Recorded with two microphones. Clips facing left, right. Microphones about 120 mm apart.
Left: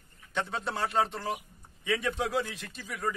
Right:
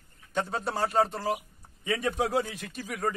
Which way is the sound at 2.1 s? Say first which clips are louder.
Right 3 dB; 45° right (ahead or behind).